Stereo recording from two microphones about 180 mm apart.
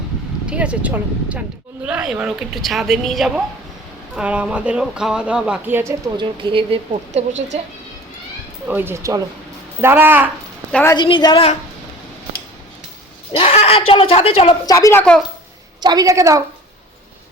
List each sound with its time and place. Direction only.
0.4 s speech: 5° right (ahead or behind); by 7.3 s 35° right (ahead or behind)
8.6 s speech: 10° right (ahead or behind)
10.7 s a woman's voice: 5° left (ahead or behind)
10.9 s a woman's voice: 25° left (ahead or behind)
13.3 s speech: 35° left (ahead or behind)
14.7 s speech: 15° left (ahead or behind)
15.8 s a woman's voice: 20° right (ahead or behind)